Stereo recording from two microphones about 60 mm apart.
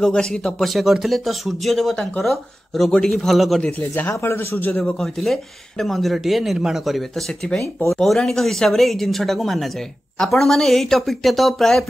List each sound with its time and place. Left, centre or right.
0.0 s speech: centre
2.9 s speech: centre
3.7 s speech: left
4.1 s a man's voice: left
4.8 s speech: centre